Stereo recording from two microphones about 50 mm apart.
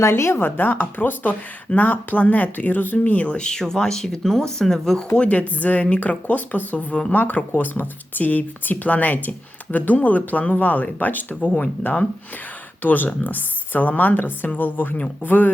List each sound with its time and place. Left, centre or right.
0.2 s speech: left; by 5.0 s centre
5.1 s speech: left